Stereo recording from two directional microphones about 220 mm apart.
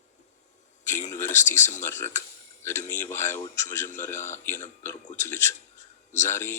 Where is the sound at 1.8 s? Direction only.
10° left (ahead or behind).